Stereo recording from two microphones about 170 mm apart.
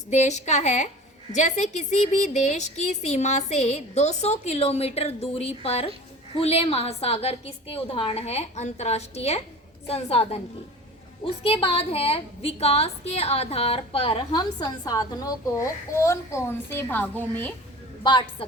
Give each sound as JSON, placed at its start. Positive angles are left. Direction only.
{"t": 0.1, "sound": "a woman's voice", "side_deg": 40}
{"t": 11.4, "sound": "a woman's voice", "side_deg": 35}
{"t": 18.0, "sound": "a woman's voice", "side_deg": 30}